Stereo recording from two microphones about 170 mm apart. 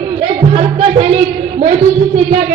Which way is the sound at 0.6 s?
40° right (ahead or behind).